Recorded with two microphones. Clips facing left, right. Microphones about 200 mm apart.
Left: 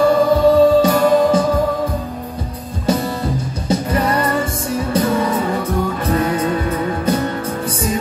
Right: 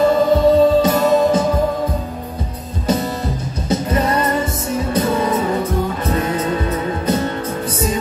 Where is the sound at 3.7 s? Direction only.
25° right (ahead or behind).